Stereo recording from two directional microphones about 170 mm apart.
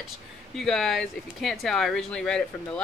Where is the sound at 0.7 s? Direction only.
Centre (ahead or behind).